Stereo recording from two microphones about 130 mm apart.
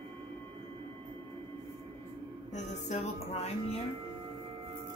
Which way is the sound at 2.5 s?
65° left (ahead or behind).